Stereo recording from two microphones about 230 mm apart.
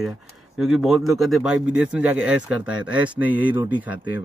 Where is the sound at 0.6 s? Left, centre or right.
Centre.